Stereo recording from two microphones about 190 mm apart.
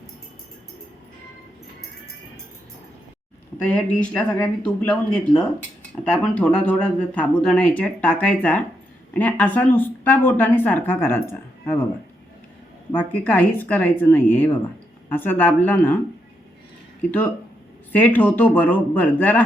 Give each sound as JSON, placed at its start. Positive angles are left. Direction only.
{"t": 3.7, "sound": "a woman's voice", "side_deg": 5}
{"t": 12.9, "sound": "a woman's voice", "side_deg": 10}
{"t": 17.1, "sound": "a woman's voice", "side_deg": 10}